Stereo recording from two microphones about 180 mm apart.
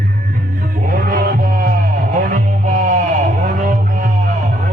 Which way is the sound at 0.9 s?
50° right (ahead or behind).